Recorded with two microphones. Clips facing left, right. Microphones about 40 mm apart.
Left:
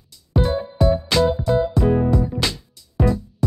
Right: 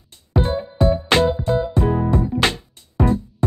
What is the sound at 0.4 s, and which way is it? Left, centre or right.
Music, right.